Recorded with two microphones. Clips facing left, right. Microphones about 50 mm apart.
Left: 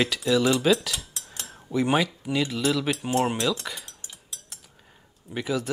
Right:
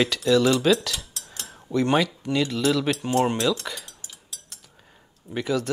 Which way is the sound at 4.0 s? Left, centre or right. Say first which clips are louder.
Even; left.